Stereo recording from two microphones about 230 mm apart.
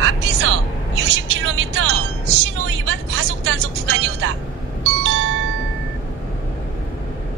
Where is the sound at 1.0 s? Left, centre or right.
Right.